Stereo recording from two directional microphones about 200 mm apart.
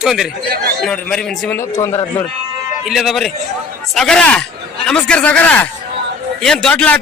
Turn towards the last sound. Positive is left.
turn(degrees=5)  # may be behind; listen again after turning